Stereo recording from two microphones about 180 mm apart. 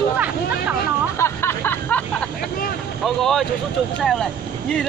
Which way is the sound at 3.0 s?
Centre (ahead or behind).